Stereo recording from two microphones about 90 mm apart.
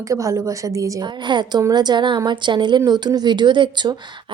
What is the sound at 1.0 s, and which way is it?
A woman's voice, 55° right (ahead or behind).